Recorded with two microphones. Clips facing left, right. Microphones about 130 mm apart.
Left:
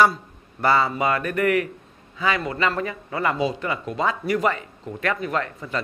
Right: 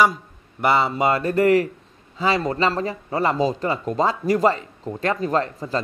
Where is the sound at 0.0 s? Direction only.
15° right (ahead or behind).